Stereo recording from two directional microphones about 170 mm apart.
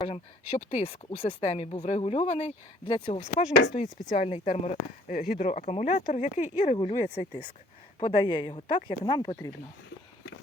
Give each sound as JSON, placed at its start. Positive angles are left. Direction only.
{"t": 0.0, "sound": "speech", "side_deg": 40}
{"t": 7.9, "sound": "speech", "side_deg": 30}